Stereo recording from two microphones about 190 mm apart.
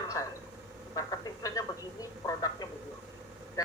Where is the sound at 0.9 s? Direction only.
15° left (ahead or behind).